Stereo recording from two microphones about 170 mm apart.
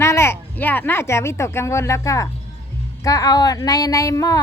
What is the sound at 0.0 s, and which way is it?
Speech, 15° left (ahead or behind).